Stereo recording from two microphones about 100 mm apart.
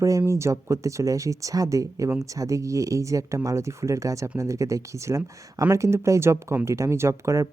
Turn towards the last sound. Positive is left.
turn(degrees=-30)  # may be behind; listen again after turning